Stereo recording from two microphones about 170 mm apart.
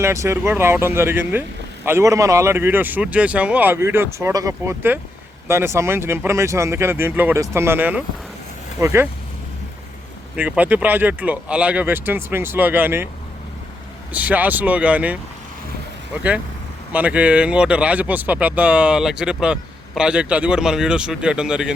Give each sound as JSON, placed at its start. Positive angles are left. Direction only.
{"t": 0.0, "sound": "speech", "side_deg": -15}
{"t": 10.3, "sound": "speech", "side_deg": -10}
{"t": 14.1, "sound": "speech", "side_deg": -10}
{"t": 16.9, "sound": "speech", "side_deg": -10}